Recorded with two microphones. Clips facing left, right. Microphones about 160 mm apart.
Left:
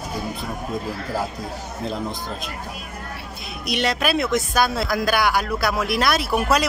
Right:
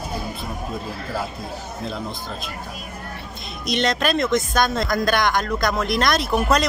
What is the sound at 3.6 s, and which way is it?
Speech, 10° left (ahead or behind).